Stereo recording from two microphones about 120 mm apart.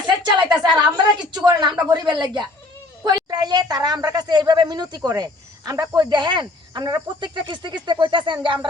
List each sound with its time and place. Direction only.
0.2 s a woman's voice: 40° right (ahead or behind)